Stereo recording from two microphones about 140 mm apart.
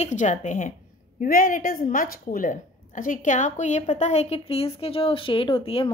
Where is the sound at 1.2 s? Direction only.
80° left.